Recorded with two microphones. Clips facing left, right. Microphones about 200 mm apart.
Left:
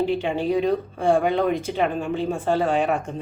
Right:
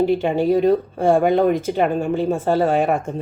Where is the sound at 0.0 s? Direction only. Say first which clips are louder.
Right 5 dB; 45° right (ahead or behind).